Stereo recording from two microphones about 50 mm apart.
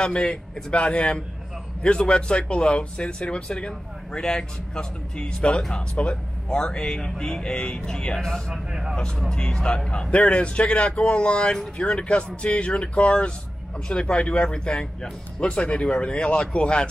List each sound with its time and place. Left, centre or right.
0.0 s speech: centre
9.3 s speech: centre